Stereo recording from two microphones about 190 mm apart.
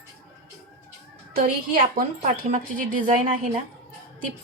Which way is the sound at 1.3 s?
50° right (ahead or behind).